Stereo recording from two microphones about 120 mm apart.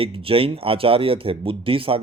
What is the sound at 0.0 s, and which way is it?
Speech, 50° right (ahead or behind).